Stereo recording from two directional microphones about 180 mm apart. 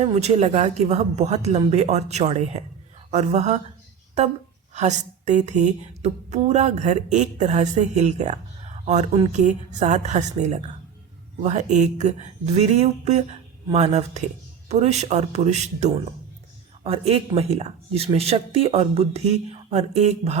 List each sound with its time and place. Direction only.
0.0 s a woman's voice: 35° right (ahead or behind)
4.7 s a woman's voice: 40° right (ahead or behind)